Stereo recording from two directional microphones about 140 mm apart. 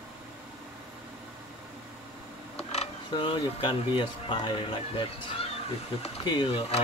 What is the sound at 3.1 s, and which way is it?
Speech, 35° left (ahead or behind).